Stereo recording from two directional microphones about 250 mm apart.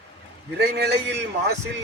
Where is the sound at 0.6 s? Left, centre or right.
Right.